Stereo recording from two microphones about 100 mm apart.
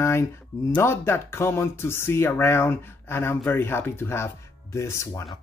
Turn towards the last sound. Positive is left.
turn(degrees=30)  # may be behind; listen again after turning